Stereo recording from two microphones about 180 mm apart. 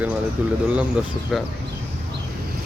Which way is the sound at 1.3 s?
Centre (ahead or behind).